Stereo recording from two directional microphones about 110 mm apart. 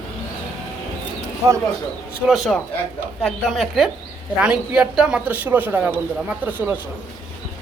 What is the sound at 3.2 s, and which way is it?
A woman's voice, centre (ahead or behind).